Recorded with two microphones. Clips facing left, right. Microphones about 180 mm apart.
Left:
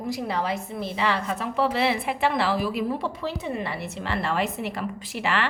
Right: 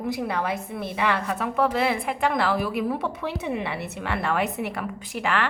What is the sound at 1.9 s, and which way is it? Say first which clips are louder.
Speech: even; 5° left (ahead or behind).